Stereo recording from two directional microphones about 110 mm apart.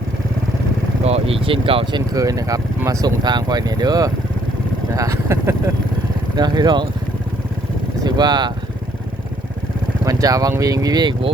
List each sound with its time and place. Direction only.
1.0 s speech: 65° right (ahead or behind); by 5.7 s 25° right (ahead or behind)
6.3 s speech: 40° right (ahead or behind)
8.0 s speech: 40° right (ahead or behind)
10.0 s vehicle: 30° right (ahead or behind)
10.6 s speech: 35° right (ahead or behind)